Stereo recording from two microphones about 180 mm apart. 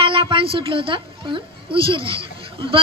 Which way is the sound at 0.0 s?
30° right (ahead or behind).